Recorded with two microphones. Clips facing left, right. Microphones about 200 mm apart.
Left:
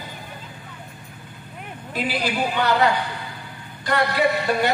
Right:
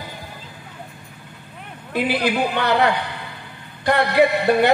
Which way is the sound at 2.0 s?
60° right (ahead or behind).